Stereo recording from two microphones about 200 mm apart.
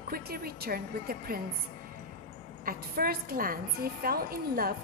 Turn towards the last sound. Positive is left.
turn(degrees=-45)  # may be behind; listen again after turning